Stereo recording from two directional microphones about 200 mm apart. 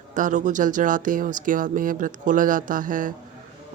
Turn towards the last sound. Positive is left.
turn(degrees=-40)  # may be behind; listen again after turning